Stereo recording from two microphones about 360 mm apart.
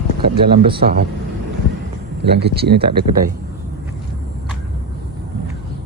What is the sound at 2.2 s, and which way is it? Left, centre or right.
Speech, right.